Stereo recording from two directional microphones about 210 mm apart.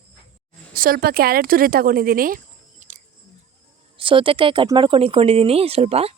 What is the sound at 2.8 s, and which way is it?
Music, 35° right (ahead or behind).